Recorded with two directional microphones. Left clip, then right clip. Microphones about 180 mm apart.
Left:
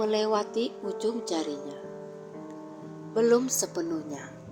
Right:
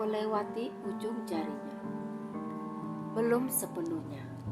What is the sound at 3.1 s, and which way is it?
Speech, 20° left (ahead or behind).